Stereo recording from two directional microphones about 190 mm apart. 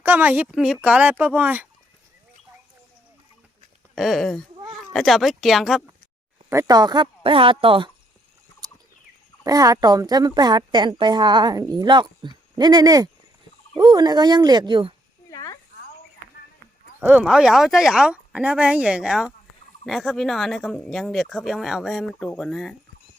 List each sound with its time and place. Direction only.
0.0 s a woman's voice: 10° right (ahead or behind)
3.9 s speech: centre (ahead or behind)
6.5 s a woman's voice: 15° right (ahead or behind)
9.4 s a woman's voice: 20° right (ahead or behind)
15.3 s a sound: 20° left (ahead or behind)
17.0 s speech: 10° right (ahead or behind)